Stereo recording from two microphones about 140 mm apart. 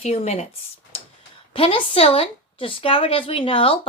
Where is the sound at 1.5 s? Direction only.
40° left (ahead or behind).